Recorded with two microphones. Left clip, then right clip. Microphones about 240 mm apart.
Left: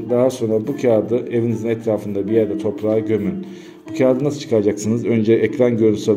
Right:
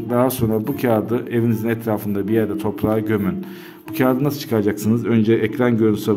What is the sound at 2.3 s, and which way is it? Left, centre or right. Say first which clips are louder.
Speech: left 3 dB; right.